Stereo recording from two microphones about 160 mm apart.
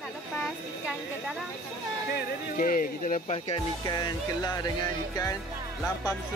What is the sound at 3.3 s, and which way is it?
Speech, 40° left (ahead or behind).